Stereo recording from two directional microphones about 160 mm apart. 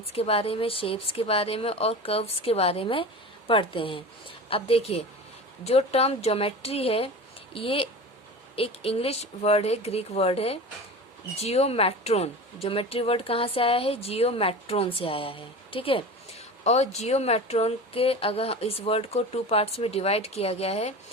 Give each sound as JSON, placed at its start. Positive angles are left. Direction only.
{"t": 0.0, "sound": "speech", "side_deg": 40}